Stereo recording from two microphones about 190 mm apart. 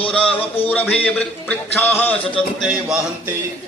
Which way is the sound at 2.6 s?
Centre (ahead or behind).